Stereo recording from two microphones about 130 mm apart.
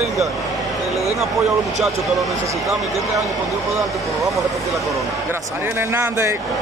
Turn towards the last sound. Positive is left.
turn(degrees=-20)  # may be behind; listen again after turning